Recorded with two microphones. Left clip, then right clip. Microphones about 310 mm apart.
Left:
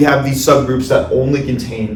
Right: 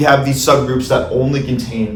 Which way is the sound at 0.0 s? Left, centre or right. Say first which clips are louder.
Even; centre.